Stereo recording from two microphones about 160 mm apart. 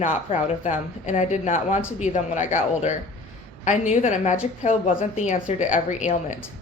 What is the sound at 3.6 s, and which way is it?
Speech, 50° left (ahead or behind).